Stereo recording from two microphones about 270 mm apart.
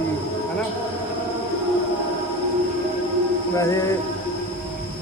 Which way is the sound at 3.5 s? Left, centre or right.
Centre.